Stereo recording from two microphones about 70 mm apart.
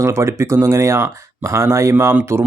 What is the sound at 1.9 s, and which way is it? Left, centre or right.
Speech, right.